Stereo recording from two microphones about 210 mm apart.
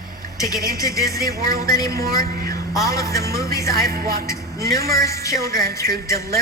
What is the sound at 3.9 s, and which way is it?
Speech, 45° right (ahead or behind).